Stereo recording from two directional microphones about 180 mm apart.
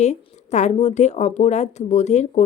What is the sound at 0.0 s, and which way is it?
A woman's voice, 40° left (ahead or behind).